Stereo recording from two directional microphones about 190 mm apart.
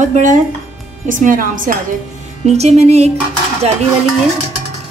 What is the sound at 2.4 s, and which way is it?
Speech, 35° right (ahead or behind).